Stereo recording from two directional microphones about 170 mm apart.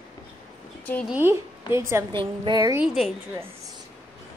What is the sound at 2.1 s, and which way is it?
Speech, 25° right (ahead or behind).